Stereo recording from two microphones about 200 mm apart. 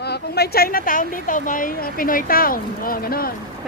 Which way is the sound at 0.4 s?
50° left (ahead or behind).